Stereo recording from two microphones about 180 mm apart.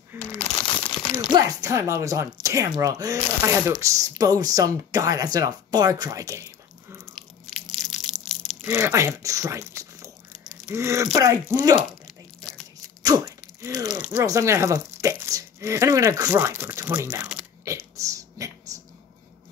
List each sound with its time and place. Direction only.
0.2 s crumpling: 10° left (ahead or behind)
0.6 s crumpling: 25° left (ahead or behind)
1.3 s speech: 20° right (ahead or behind)
7.8 s crushing: centre (ahead or behind)
8.6 s a sound: 15° right (ahead or behind)
11.1 s speech: 15° right (ahead or behind)
13.0 s a sound: 15° right (ahead or behind)
13.8 s speech: 10° right (ahead or behind)
17.9 s a sound: 20° right (ahead or behind)